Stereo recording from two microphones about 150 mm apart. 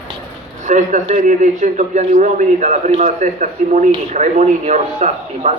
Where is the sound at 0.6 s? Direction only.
55° right (ahead or behind).